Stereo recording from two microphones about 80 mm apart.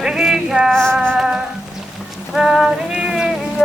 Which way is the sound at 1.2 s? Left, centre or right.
Centre.